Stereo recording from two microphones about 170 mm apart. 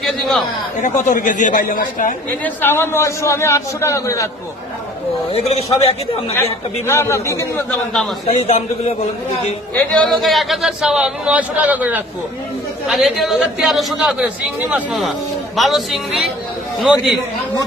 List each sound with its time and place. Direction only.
0.0 s a man's voice: centre (ahead or behind)
0.8 s speech: 50° left (ahead or behind)
2.4 s a man's voice: 10° left (ahead or behind)
5.3 s a man's voice: 35° left (ahead or behind)
6.8 s a man's voice: 15° left (ahead or behind)
8.3 s a man's voice: 40° left (ahead or behind)
9.9 s a man's voice: 5° left (ahead or behind)